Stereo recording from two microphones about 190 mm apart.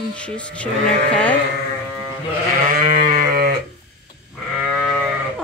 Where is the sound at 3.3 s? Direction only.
50° right (ahead or behind).